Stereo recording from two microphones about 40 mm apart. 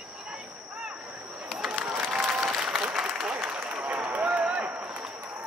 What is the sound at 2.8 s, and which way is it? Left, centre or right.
Applause, right.